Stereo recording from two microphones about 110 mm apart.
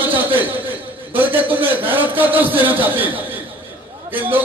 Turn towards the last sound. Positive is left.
turn(degrees=-15)  # may be behind; listen again after turning